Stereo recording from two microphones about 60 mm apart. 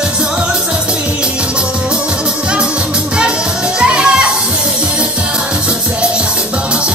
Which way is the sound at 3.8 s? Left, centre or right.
Centre.